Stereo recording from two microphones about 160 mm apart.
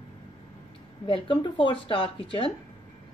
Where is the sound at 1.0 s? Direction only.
30° left (ahead or behind).